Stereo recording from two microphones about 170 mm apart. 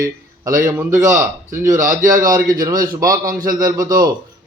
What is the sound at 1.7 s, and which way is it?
Speech, 50° right (ahead or behind).